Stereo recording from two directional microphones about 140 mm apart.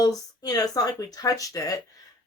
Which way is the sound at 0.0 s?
25° left (ahead or behind).